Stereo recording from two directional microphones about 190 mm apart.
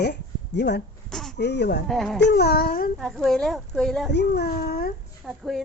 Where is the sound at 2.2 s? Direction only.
60° left (ahead or behind).